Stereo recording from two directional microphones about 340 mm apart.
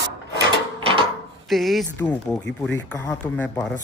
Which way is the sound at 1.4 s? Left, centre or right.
Centre.